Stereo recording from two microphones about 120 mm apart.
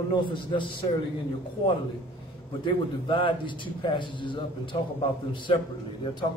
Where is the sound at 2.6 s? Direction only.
40° left (ahead or behind).